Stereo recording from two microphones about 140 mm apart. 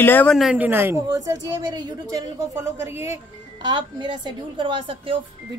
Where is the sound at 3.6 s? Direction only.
35° right (ahead or behind).